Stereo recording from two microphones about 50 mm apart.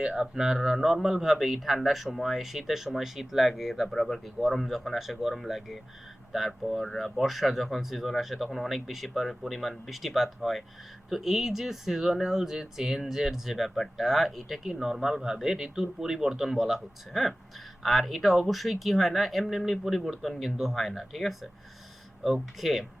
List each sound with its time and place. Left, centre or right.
0.0 s speech: centre